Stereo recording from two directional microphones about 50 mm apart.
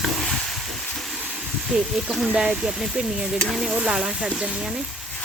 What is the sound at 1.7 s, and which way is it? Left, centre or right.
Speech, centre.